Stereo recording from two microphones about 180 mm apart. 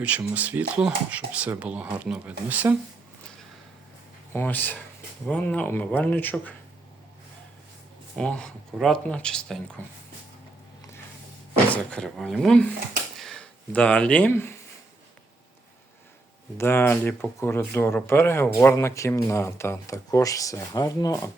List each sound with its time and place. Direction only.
0.3 s speech: 10° right (ahead or behind)
4.3 s speech: 10° left (ahead or behind)
8.1 s speech: 5° left (ahead or behind)
11.7 s speech: 5° left (ahead or behind)
13.1 s a sound: 5° left (ahead or behind)
16.6 s speech: 15° left (ahead or behind)